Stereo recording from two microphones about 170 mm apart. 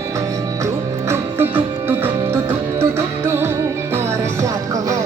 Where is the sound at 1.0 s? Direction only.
10° right (ahead or behind).